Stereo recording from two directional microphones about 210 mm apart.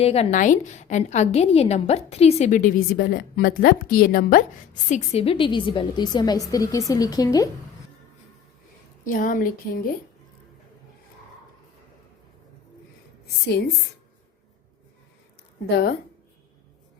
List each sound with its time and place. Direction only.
0.0 s a woman's voice: 30° left (ahead or behind)
9.0 s a woman's voice: 40° left (ahead or behind)